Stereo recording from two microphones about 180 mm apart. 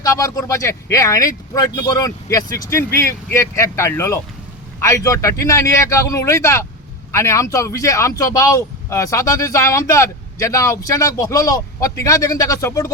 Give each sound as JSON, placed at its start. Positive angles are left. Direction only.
{"t": 0.0, "sound": "speech", "side_deg": 20}